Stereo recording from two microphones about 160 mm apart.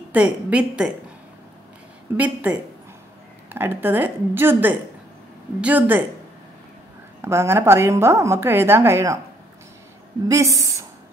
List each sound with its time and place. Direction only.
0.1 s a woman's voice: 10° right (ahead or behind)
2.1 s a woman's voice: 10° right (ahead or behind)
7.2 s a woman's voice: 15° right (ahead or behind)
10.2 s a woman's voice: 20° right (ahead or behind)